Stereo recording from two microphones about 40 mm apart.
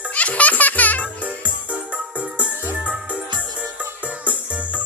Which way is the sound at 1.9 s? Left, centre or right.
Right.